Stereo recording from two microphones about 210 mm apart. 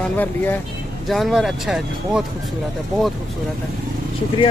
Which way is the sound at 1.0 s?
Centre (ahead or behind).